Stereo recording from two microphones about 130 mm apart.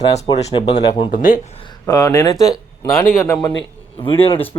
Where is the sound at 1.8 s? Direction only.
25° left (ahead or behind).